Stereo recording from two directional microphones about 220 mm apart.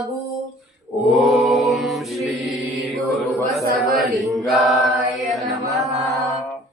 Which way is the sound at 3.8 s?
Centre (ahead or behind).